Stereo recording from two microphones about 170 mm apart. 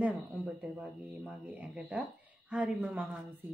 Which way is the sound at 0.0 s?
10° right (ahead or behind).